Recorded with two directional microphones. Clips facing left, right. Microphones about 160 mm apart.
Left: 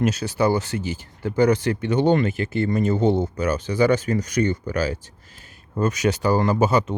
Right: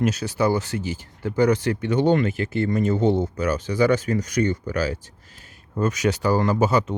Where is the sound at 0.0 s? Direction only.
30° left (ahead or behind).